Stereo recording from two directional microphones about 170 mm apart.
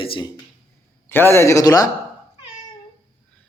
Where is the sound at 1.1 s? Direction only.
15° left (ahead or behind).